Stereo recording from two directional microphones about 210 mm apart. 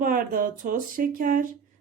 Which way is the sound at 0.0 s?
40° right (ahead or behind).